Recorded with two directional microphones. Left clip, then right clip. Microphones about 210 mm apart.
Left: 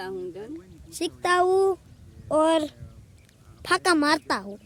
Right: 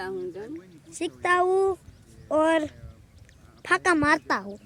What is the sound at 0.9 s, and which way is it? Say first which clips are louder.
A man's voice: left 1 dB; 20° left (ahead or behind).